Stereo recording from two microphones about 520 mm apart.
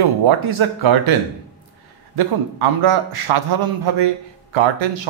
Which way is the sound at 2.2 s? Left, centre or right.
Right.